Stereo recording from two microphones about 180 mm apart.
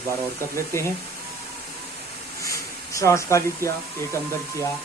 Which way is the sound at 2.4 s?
15° left (ahead or behind).